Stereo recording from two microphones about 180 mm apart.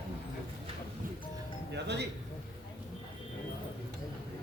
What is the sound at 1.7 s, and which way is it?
Music, 70° right (ahead or behind).